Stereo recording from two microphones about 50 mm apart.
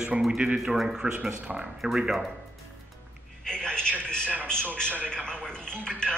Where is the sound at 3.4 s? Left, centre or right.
Centre.